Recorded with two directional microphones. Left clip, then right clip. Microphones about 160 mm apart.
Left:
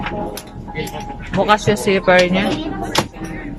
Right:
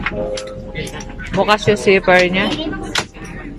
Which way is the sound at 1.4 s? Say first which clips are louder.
Right 1 dB; 15° left (ahead or behind).